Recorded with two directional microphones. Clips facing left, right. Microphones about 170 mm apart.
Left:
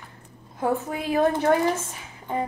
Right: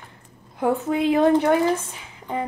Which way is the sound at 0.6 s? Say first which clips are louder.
Right 5 dB; 20° right (ahead or behind).